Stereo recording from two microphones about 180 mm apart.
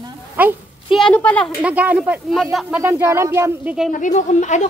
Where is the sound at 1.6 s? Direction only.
5° right (ahead or behind).